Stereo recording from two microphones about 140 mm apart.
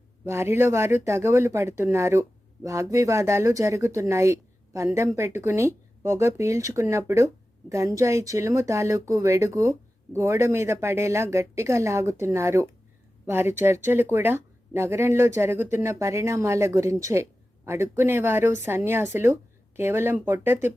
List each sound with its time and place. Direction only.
0.3 s speech: 20° right (ahead or behind)